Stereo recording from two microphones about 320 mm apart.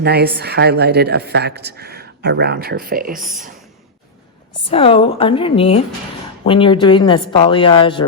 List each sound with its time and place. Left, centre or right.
0.0 s a woman's voice: right
4.7 s speech: centre